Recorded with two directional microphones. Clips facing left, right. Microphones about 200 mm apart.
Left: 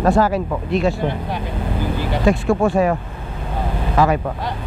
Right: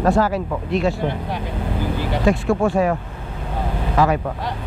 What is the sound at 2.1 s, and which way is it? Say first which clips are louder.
Speech: left 1 dB; 25° left (ahead or behind).